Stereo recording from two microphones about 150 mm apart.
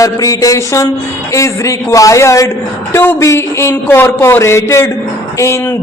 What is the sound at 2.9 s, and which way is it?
Speech, 20° left (ahead or behind).